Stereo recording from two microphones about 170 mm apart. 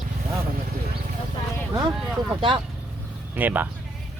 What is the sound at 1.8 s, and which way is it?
Speech, 25° right (ahead or behind).